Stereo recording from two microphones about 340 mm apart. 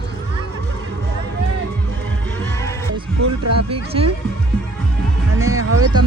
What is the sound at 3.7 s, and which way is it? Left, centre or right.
Speech, centre.